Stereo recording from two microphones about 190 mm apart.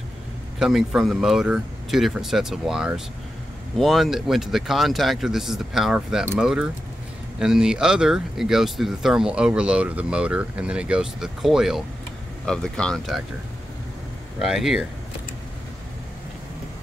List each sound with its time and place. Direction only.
0.6 s speech: 5° right (ahead or behind)
14.4 s speech: centre (ahead or behind)